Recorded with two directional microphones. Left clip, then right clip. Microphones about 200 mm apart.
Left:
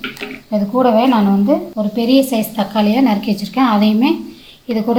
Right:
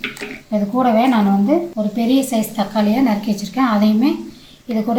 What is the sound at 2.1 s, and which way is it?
A woman's voice, 30° left (ahead or behind).